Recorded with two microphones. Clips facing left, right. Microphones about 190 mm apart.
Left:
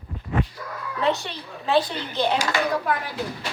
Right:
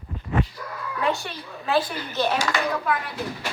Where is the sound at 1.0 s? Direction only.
25° left (ahead or behind).